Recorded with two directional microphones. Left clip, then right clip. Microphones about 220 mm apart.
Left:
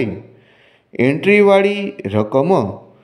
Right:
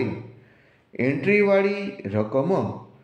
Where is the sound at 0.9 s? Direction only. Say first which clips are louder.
Left 8 dB; 35° left (ahead or behind).